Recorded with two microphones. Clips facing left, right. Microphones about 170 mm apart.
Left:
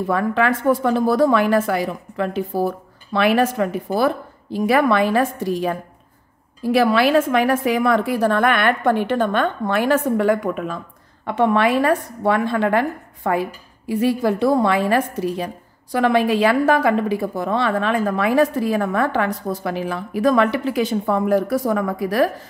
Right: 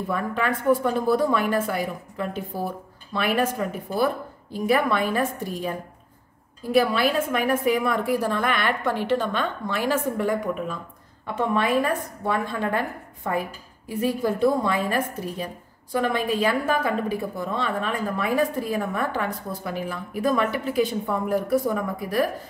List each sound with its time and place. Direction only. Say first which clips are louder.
0.0 s a woman's voice: left 7 dB; 85° left